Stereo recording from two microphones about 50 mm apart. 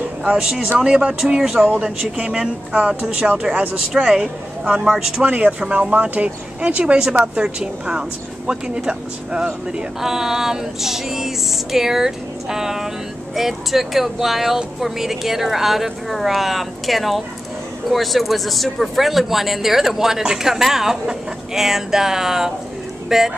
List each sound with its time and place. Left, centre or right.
0.7 s speech: centre
3.9 s a woman's voice: centre
5.2 s a woman's voice: right